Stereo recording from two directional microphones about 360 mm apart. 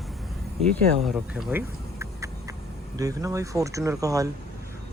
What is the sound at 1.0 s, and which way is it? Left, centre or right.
Insect, centre.